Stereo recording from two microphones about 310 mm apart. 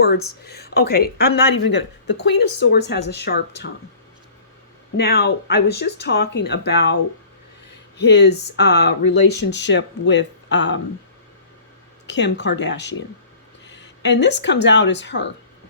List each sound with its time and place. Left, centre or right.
0.4 s speech: left
4.9 s speech: left
7.9 s speech: left
12.0 s speech: left